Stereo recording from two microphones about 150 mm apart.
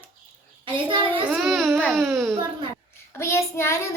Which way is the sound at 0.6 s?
35° right (ahead or behind).